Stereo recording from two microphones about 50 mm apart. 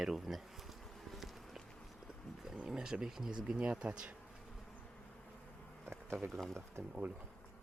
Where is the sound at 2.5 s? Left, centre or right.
Centre.